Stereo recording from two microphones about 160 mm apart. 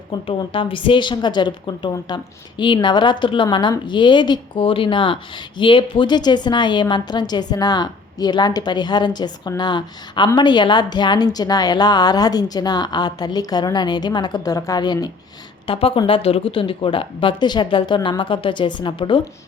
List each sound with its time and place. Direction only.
0.3 s a woman's voice: 30° left (ahead or behind)